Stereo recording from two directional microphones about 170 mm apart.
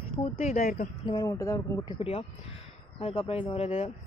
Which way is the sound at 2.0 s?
35° left (ahead or behind).